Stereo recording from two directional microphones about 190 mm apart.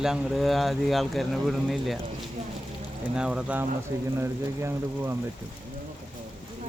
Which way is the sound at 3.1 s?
5° right (ahead or behind).